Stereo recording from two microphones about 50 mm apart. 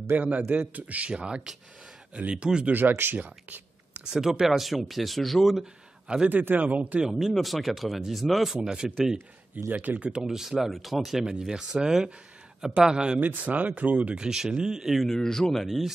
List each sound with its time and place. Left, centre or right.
0.1 s speech: right
1.1 s speech: centre
3.1 s whispering: right
4.1 s speech: centre
5.6 s a sound: centre
6.2 s speech: right
7.0 s speech: centre
8.6 s speech: centre
9.7 s speech: right
10.2 s speech: centre
13.2 s speech: right
14.2 s speech: centre
15.0 s speech: centre